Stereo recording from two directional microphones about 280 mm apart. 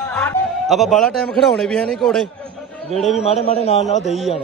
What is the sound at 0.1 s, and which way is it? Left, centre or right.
A man's voice, centre.